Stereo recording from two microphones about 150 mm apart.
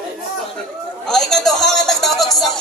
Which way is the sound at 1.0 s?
Centre (ahead or behind).